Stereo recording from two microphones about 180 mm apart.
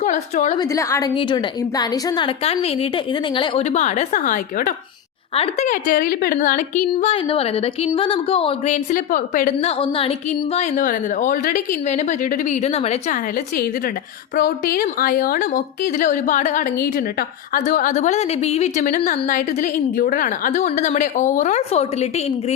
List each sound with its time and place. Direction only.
0.0 s a woman's voice: 40° left (ahead or behind)
0.6 s a woman's voice: 15° left (ahead or behind)
1.1 s a woman's voice: 25° left (ahead or behind); by 4.7 s 50° left (ahead or behind)
5.3 s a woman's voice: 30° left (ahead or behind)
5.6 s a woman's voice: 50° left (ahead or behind)
9.6 s a woman's voice: 35° left (ahead or behind)
14.3 s a woman's voice: 55° left (ahead or behind)
16.8 s a woman's voice: 55° left (ahead or behind); by 22.5 s 35° left (ahead or behind)